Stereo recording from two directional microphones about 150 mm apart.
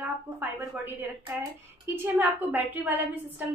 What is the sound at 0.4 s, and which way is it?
A woman's voice, 10° right (ahead or behind).